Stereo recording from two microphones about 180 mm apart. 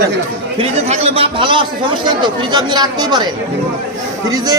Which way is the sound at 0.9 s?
35° right (ahead or behind).